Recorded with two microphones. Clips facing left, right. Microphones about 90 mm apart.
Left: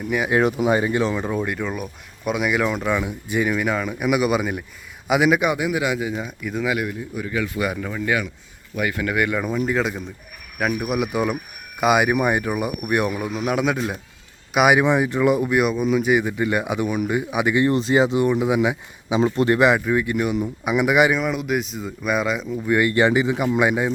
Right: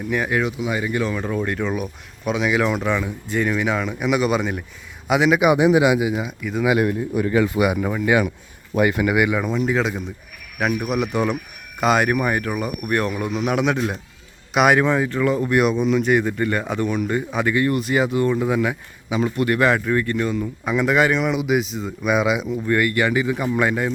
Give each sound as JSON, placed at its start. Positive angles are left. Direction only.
{"t": 0.4, "sound": "speech", "side_deg": 45}
{"t": 0.8, "sound": "a man's voice", "side_deg": 25}
{"t": 1.5, "sound": "speech", "side_deg": 0}
{"t": 5.5, "sound": "speech", "side_deg": -25}
{"t": 6.8, "sound": "speech", "side_deg": -50}
{"t": 7.3, "sound": "speech", "side_deg": -30}
{"t": 7.6, "sound": "speech", "side_deg": -15}
{"t": 8.7, "sound": "speech", "side_deg": -25}
{"t": 15.4, "sound": "speech", "side_deg": 5}
{"t": 21.2, "sound": "speech", "side_deg": 0}
{"t": 22.6, "sound": "a man's voice", "side_deg": 15}